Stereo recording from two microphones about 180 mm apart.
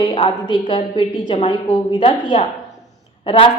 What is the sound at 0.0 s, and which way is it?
A woman's voice, 30° left (ahead or behind).